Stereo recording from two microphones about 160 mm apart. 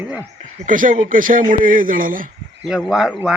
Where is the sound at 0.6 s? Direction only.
55° right (ahead or behind).